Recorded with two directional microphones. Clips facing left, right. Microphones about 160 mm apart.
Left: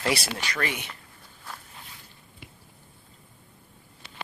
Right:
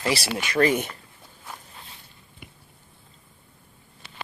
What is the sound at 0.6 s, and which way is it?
Speech, 40° right (ahead or behind).